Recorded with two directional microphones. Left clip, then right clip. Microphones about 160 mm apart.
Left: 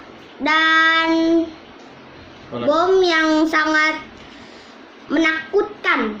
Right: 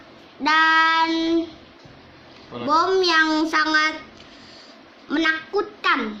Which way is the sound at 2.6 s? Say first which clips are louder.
Left 3 dB; 35° right (ahead or behind).